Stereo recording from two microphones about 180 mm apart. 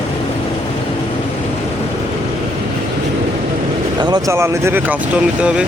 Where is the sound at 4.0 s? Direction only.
20° right (ahead or behind); by 5.6 s 5° right (ahead or behind).